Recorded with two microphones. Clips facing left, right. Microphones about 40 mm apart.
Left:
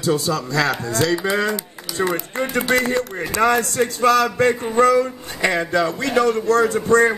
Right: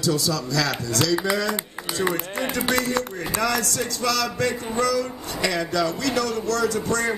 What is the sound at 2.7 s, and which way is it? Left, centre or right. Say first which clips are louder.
A man's voice: left 4 dB; left.